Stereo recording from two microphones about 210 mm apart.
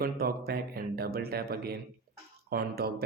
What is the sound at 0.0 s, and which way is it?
Speech, 45° right (ahead or behind).